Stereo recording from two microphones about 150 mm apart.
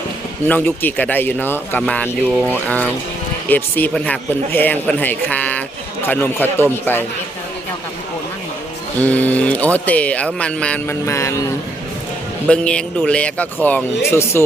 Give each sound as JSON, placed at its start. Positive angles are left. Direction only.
{"t": 0.4, "sound": "speech", "side_deg": 10}
{"t": 9.0, "sound": "speech", "side_deg": 10}
{"t": 11.0, "sound": "mantra", "side_deg": 20}
{"t": 12.5, "sound": "speech", "side_deg": 5}